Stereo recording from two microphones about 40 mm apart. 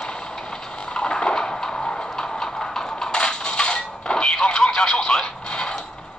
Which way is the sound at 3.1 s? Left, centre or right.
Left.